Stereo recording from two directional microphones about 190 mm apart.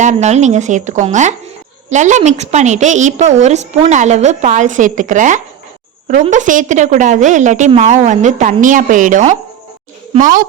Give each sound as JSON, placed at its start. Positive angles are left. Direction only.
{"t": 0.0, "sound": "a woman's voice", "side_deg": -40}